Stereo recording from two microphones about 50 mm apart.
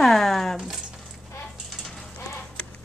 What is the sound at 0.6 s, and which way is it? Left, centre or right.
Speech, centre.